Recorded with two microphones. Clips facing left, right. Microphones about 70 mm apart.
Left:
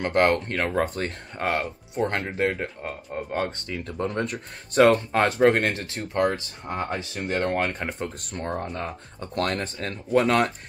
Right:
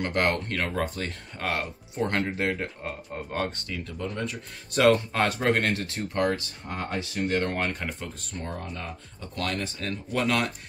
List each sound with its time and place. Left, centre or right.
0.0 s speech: left
3.5 s speech: left
3.8 s speech: left
4.7 s speech: left
8.3 s speech: left
9.8 s speech: left